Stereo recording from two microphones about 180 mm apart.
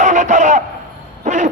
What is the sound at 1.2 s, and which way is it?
Owl, 45° right (ahead or behind).